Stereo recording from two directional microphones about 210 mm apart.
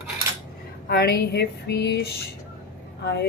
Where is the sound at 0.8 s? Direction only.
50° left (ahead or behind).